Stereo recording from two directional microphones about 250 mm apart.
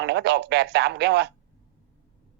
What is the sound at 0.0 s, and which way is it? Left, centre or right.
Speech, right.